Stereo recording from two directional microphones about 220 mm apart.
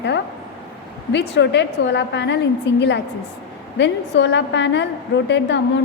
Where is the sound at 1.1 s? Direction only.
50° left (ahead or behind).